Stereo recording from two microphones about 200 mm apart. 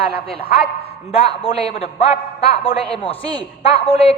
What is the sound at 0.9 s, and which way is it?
A woman's voice, 30° left (ahead or behind).